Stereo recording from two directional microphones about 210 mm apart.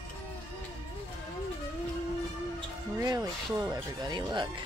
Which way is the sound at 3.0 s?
20° right (ahead or behind).